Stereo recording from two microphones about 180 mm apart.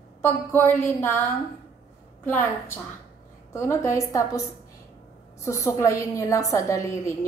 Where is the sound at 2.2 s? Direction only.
10° left (ahead or behind).